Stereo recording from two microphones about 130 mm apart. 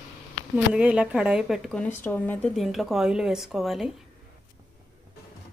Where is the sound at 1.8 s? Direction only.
15° left (ahead or behind).